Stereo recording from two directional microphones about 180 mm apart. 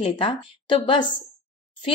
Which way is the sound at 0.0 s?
30° left (ahead or behind).